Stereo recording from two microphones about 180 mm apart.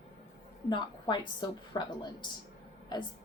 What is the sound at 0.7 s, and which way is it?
A woman's voice, 25° left (ahead or behind).